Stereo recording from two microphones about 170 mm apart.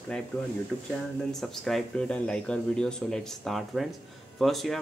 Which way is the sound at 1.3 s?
Centre (ahead or behind).